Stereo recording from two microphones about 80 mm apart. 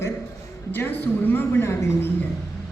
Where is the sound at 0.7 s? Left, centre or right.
Left.